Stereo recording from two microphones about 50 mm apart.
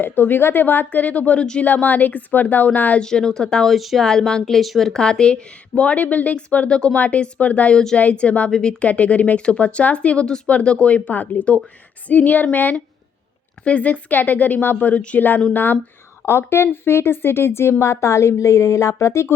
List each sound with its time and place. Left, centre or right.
0.0 s speech: left
3.0 s a woman's voice: centre
3.7 s speech: centre
4.0 s a woman's voice: centre
8.9 s a woman's voice: left
13.7 s speech: left
16.2 s speech: left